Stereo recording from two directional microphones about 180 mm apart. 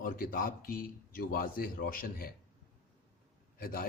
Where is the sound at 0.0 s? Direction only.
50° left (ahead or behind).